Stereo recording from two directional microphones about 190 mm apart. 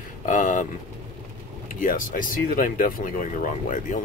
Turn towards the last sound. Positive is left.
turn(degrees=40)  # may be behind; listen again after turning